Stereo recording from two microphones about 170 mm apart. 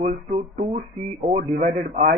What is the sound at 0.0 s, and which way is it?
A man's voice, 40° right (ahead or behind).